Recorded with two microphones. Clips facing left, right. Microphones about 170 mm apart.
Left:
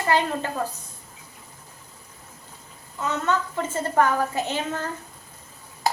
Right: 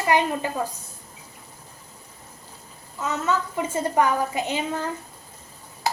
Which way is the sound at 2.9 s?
Centre (ahead or behind).